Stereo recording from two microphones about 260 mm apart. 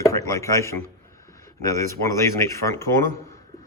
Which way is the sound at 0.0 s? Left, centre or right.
Centre.